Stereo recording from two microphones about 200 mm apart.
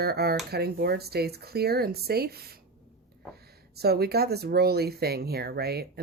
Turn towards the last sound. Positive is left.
turn(degrees=-50)  # may be behind; listen again after turning